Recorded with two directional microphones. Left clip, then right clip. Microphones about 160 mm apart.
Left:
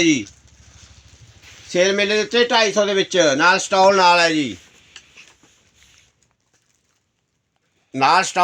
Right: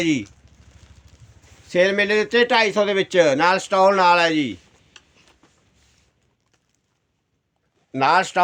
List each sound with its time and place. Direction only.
0.0 s a man's voice: 30° right (ahead or behind)
1.5 s a man's voice: 25° right (ahead or behind)
4.1 s speech: centre (ahead or behind)
5.8 s a sound: 5° right (ahead or behind)
7.9 s speech: 10° right (ahead or behind)